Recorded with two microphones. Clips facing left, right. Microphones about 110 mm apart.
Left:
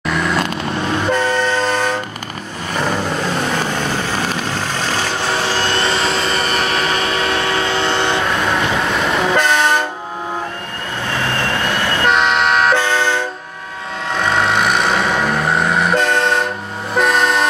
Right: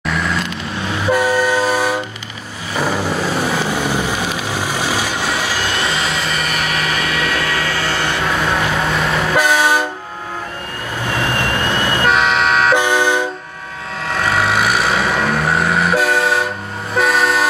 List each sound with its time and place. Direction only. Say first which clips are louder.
0.0 s vehicle: left 2 dB; centre (ahead or behind)
1.0 s train: right 4 dB; 10° right (ahead or behind)
2.7 s vehicle: right 1 dB; 5° right (ahead or behind)
6.1 s train: left 3 dB; 30° left (ahead or behind)
8.3 s train: even; centre (ahead or behind)
11.2 s vehicle: even; 15° right (ahead or behind)
12.0 s toot: left 1 dB; centre (ahead or behind)
12.7 s vehicle: right 2 dB; 15° right (ahead or behind)
14.1 s vehicle: even; centre (ahead or behind)